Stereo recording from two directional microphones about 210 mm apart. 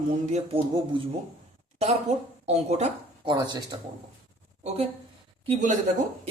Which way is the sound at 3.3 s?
20° right (ahead or behind).